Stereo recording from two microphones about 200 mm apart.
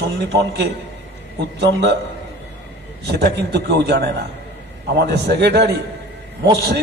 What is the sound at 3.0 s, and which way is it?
A man's voice, 55° right (ahead or behind).